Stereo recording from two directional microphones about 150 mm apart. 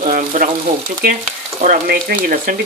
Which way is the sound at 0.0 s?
60° right (ahead or behind).